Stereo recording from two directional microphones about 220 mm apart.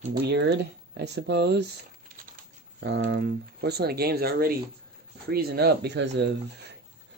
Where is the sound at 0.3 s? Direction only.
50° right (ahead or behind).